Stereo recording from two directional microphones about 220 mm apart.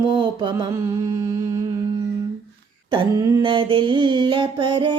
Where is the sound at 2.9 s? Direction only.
20° right (ahead or behind).